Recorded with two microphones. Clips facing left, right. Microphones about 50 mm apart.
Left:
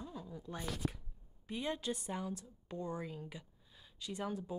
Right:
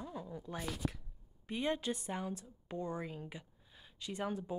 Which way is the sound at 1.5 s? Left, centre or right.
Right.